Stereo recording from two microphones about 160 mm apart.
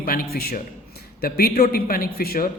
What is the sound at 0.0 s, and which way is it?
A man's voice, 65° left (ahead or behind).